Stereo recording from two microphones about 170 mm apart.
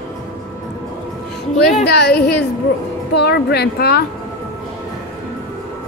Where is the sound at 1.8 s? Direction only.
70° left (ahead or behind).